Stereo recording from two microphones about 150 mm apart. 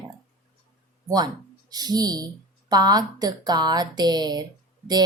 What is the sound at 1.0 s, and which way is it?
A woman's voice, 25° right (ahead or behind).